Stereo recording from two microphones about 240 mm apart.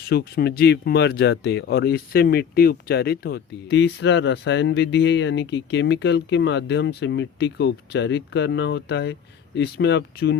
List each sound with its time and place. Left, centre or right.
0.1 s speech: left